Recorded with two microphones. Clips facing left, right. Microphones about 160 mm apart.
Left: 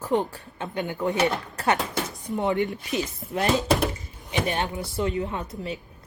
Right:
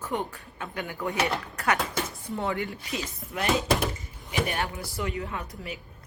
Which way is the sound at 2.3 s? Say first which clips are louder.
Left 6 dB; 20° left (ahead or behind).